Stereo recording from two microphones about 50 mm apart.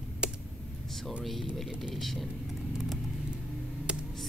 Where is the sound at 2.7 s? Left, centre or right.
Centre.